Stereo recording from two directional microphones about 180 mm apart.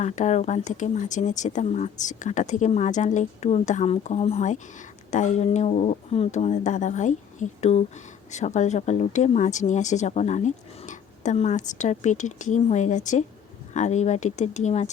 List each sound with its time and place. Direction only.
0.0 s speech: 40° left (ahead or behind)